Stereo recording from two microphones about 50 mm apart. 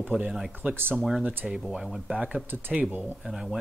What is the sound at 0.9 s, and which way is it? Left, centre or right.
Speech, centre.